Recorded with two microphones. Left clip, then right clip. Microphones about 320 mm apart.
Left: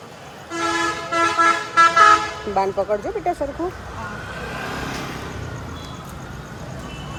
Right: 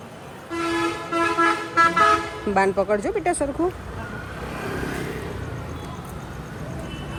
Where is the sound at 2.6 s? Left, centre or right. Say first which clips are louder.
Even; right.